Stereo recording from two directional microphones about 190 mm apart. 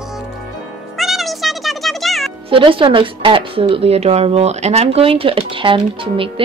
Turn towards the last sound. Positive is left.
turn(degrees=-25)  # may be behind; listen again after turning